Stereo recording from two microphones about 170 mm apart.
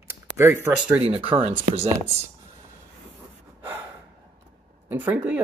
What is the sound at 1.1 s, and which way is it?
Speech, 30° right (ahead or behind).